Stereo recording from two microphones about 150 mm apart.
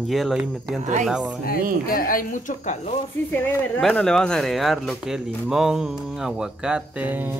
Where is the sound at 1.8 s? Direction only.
70° left (ahead or behind); by 3.0 s 55° left (ahead or behind).